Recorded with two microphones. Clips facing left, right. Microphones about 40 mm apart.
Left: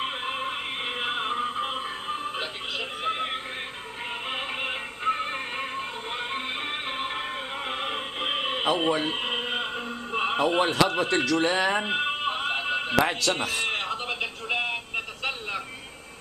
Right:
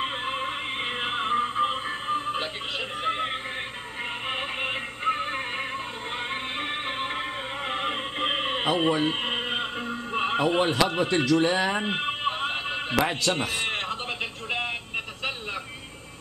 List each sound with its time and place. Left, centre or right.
0.0 s music: centre
10.1 s neigh: centre
10.8 s a man's voice: centre
14.0 s music: centre